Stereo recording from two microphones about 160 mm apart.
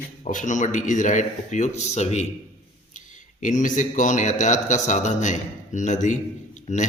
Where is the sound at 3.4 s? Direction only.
50° left (ahead or behind).